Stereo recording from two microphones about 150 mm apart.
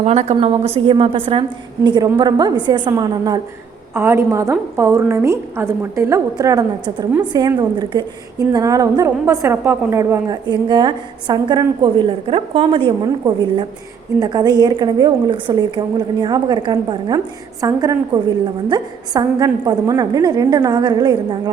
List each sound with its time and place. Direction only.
0.0 s a woman's voice: 45° right (ahead or behind); by 3.4 s 25° right (ahead or behind)
3.9 s a woman's voice: 15° right (ahead or behind)
8.5 s a woman's voice: 25° right (ahead or behind)